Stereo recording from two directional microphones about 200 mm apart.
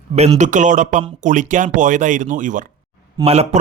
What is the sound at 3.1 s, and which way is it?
Speech, 30° right (ahead or behind).